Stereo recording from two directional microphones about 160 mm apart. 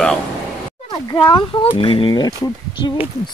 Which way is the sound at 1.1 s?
30° left (ahead or behind).